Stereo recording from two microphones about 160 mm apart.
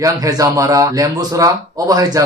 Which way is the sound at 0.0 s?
20° right (ahead or behind).